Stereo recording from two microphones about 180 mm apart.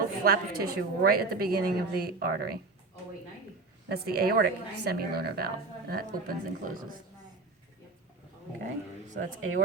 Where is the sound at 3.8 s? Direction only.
60° right (ahead or behind).